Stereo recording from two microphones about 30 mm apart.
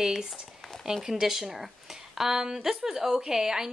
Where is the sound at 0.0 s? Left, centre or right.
Centre.